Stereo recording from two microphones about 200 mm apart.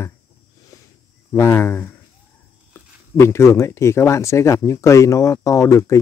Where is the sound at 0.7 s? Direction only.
15° left (ahead or behind).